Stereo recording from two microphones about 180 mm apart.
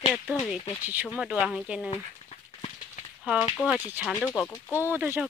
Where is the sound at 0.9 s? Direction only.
5° right (ahead or behind).